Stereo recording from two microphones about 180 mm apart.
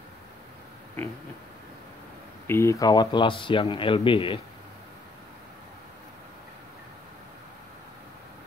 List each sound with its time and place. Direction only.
2.4 s speech: 15° left (ahead or behind)